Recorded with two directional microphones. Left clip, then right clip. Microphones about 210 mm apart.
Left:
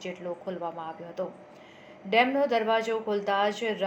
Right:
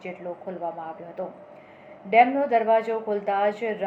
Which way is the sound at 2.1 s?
30° left (ahead or behind).